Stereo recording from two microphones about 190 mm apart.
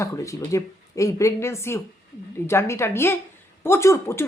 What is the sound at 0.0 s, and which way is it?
Speech, 15° left (ahead or behind).